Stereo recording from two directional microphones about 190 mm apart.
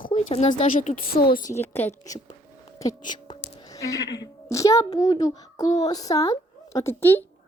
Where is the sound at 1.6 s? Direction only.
10° left (ahead or behind).